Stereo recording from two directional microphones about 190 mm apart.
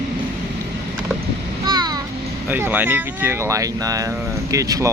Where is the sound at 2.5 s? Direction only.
10° right (ahead or behind).